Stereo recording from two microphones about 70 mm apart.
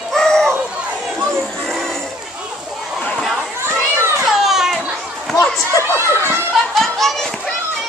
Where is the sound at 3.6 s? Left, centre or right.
Right.